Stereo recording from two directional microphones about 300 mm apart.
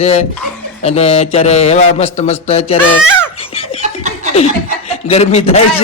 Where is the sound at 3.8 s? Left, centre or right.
Right.